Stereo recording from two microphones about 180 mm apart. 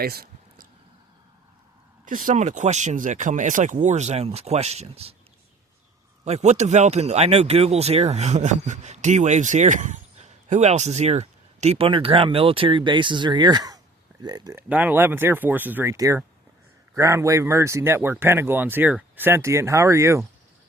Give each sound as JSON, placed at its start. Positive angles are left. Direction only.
{"t": 0.0, "sound": "a sound", "side_deg": -55}
{"t": 2.0, "sound": "speech", "side_deg": -45}
{"t": 6.2, "sound": "speech", "side_deg": -40}
{"t": 14.7, "sound": "speech", "side_deg": -10}